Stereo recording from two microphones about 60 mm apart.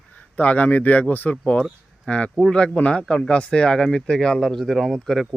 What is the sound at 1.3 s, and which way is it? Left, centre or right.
Speech, centre.